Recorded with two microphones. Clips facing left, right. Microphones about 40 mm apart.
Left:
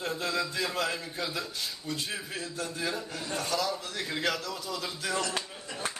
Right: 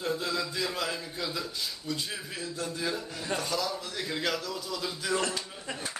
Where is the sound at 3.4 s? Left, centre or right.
Left.